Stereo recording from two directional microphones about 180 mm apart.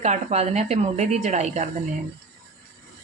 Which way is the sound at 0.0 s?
40° right (ahead or behind).